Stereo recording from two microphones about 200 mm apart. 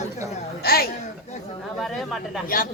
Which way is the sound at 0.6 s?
50° left (ahead or behind).